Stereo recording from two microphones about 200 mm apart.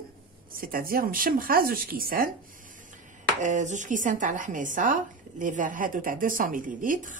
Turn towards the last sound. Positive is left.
turn(degrees=-40)  # may be behind; listen again after turning